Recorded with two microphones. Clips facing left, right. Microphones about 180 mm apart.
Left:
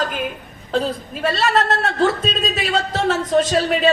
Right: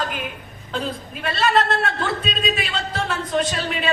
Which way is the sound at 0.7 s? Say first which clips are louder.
Left 6 dB; 40° left (ahead or behind).